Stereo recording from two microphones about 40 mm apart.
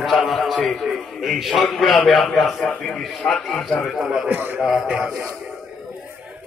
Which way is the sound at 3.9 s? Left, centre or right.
Centre.